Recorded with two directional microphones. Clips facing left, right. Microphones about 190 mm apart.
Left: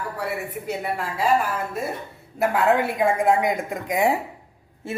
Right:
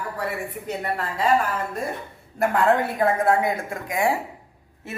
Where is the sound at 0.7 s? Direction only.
5° left (ahead or behind).